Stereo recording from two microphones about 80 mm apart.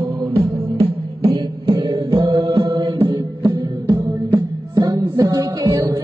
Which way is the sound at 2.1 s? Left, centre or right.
Right.